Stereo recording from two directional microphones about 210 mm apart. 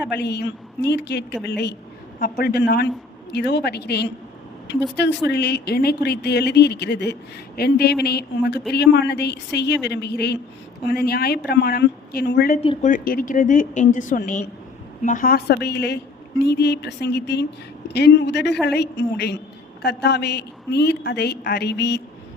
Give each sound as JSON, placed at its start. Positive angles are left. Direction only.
{"t": 0.1, "sound": "a woman's voice", "side_deg": 55}
{"t": 12.6, "sound": "a woman's voice", "side_deg": 35}